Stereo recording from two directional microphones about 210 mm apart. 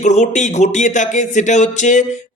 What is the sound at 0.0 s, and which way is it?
Speech, 35° left (ahead or behind).